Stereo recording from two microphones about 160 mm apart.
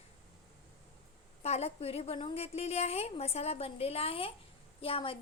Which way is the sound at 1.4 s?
40° left (ahead or behind).